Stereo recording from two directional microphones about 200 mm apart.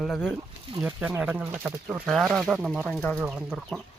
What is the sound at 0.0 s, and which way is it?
Speech, centre (ahead or behind).